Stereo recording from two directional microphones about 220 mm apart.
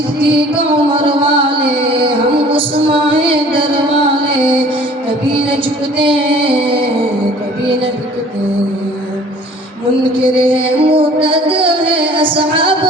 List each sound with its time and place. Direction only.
0.2 s music: 25° right (ahead or behind)
5.3 s music: 25° right (ahead or behind)
10.2 s music: 25° right (ahead or behind)